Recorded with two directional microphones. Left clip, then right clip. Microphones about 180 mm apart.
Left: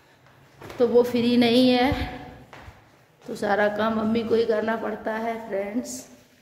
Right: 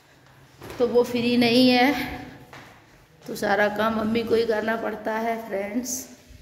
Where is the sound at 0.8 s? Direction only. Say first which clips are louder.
Left 2 dB; 20° left (ahead or behind).